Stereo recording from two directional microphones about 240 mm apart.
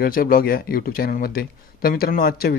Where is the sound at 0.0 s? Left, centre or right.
Left.